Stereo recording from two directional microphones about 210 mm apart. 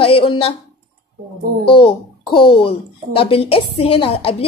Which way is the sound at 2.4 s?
25° left (ahead or behind).